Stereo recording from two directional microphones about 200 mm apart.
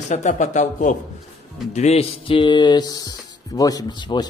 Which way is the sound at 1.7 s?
35° left (ahead or behind).